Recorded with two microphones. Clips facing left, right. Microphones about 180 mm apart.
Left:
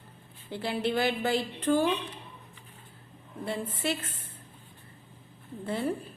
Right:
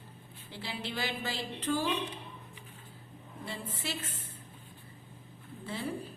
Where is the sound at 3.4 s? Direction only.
55° left (ahead or behind).